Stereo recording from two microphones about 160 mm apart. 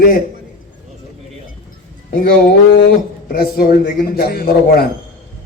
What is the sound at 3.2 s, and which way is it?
A man's voice, 70° left (ahead or behind).